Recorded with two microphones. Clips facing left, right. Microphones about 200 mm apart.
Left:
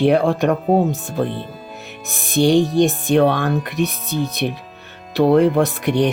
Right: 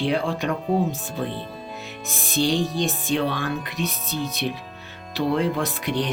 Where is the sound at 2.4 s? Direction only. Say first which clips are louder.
Left 8 dB; 65° left (ahead or behind).